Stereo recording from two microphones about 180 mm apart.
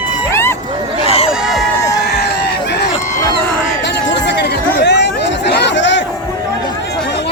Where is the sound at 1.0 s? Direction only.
35° left (ahead or behind).